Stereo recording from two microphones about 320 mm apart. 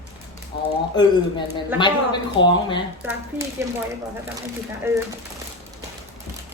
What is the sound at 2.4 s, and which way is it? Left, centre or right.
Speech, left.